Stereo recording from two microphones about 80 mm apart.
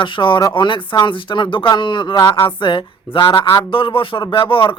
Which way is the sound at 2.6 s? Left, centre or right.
Left.